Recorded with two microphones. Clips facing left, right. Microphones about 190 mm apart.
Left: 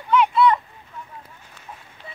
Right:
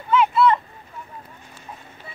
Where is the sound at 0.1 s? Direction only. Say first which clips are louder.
Even; 5° right (ahead or behind).